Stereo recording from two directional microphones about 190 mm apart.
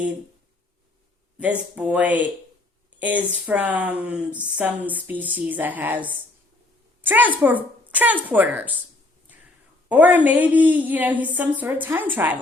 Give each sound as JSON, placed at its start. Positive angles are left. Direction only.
{"t": 1.4, "sound": "a woman's voice", "side_deg": -5}
{"t": 9.9, "sound": "a woman's voice", "side_deg": -10}